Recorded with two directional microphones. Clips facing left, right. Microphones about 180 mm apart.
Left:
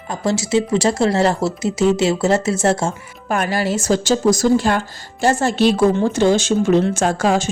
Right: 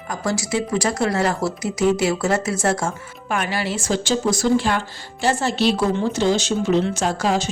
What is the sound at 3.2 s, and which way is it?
A woman's voice, 40° left (ahead or behind).